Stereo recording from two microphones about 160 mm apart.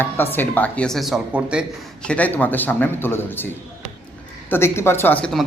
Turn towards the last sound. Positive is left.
turn(degrees=10)  # may be behind; listen again after turning